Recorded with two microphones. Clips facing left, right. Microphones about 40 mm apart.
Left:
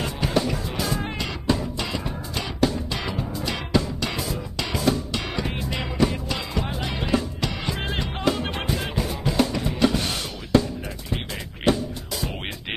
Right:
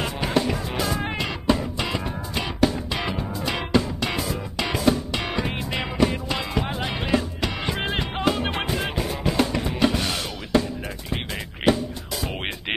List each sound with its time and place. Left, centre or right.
0.0 s music: centre
12.4 s music: right